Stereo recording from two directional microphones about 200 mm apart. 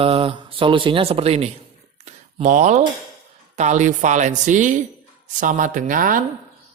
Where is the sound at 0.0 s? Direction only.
25° right (ahead or behind).